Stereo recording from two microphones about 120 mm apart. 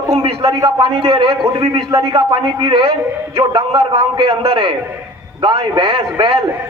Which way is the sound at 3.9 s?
50° right (ahead or behind).